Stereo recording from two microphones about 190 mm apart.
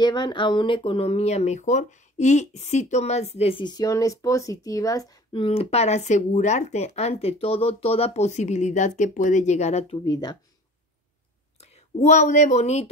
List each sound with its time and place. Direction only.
0.0 s speech: 25° left (ahead or behind)
9.9 s speech: 20° left (ahead or behind)
11.6 s speech: 35° left (ahead or behind)